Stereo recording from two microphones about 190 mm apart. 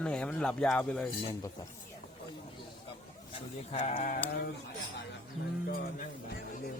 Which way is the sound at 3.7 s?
30° left (ahead or behind).